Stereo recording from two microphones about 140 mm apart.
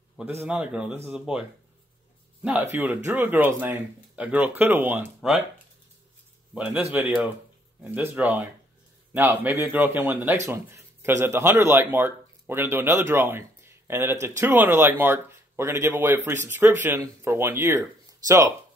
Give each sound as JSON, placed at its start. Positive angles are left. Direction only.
{"t": 0.2, "sound": "speech", "side_deg": -10}
{"t": 2.6, "sound": "speech", "side_deg": -15}
{"t": 6.5, "sound": "speech", "side_deg": -10}